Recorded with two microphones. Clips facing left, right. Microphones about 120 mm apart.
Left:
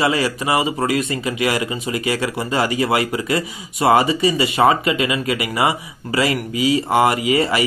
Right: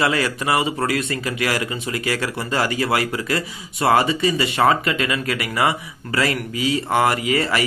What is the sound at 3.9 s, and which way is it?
Speech, 10° left (ahead or behind).